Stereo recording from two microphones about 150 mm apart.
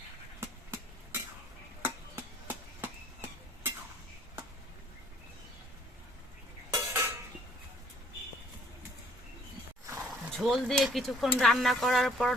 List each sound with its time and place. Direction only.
0.3 s vehicle: 15° right (ahead or behind)
1.8 s chop: 15° right (ahead or behind)
6.7 s cutlery: 15° right (ahead or behind)
9.8 s roaring cats: 15° right (ahead or behind)
10.3 s speech: centre (ahead or behind)